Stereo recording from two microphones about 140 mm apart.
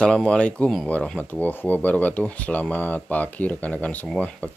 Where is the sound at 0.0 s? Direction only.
5° left (ahead or behind).